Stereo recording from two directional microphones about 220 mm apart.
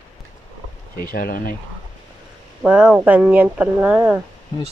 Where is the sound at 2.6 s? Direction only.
5° right (ahead or behind).